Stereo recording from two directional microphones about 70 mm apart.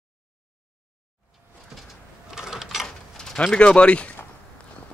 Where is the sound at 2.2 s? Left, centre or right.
Centre.